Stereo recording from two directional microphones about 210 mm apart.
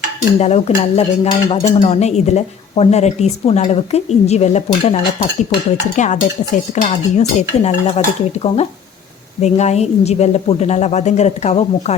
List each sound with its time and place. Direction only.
0.3 s dishes: 30° left (ahead or behind)
6.0 s dishes: 35° left (ahead or behind)